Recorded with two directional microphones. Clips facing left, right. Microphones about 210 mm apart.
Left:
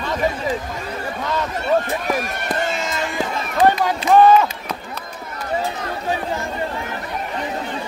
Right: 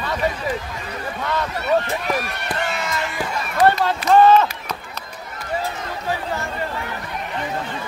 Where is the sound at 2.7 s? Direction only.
25° left (ahead or behind).